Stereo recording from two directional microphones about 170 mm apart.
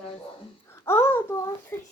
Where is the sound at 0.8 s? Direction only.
15° left (ahead or behind).